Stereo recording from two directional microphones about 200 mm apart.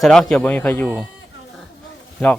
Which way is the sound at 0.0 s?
Centre (ahead or behind).